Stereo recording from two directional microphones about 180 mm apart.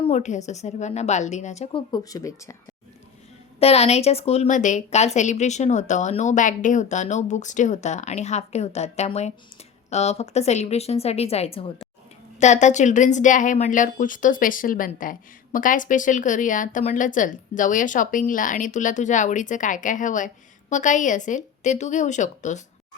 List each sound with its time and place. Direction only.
0.0 s a woman's voice: 40° left (ahead or behind)
1.9 s speech: 20° left (ahead or behind)
3.6 s a woman's voice: 35° left (ahead or behind)